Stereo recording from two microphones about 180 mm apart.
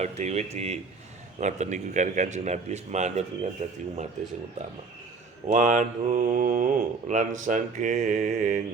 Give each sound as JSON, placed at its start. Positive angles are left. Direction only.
{"t": 0.0, "sound": "speech", "side_deg": -40}
{"t": 5.5, "sound": "mantra", "side_deg": -45}